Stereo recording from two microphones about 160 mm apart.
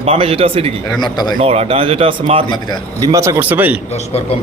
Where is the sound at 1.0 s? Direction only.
25° left (ahead or behind).